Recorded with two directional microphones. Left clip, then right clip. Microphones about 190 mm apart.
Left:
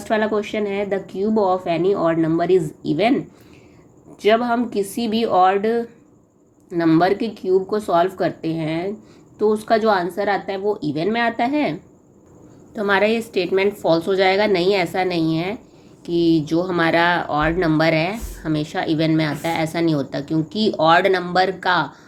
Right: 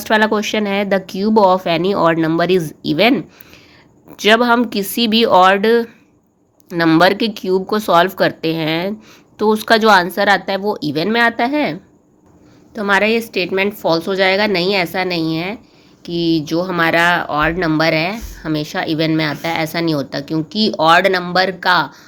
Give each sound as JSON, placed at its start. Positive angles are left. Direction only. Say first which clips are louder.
{"t": 0.0, "sound": "speech", "louder": "right 6 dB", "side_deg": -30}
{"t": 4.2, "sound": "a woman's voice", "louder": "right 5 dB", "side_deg": -35}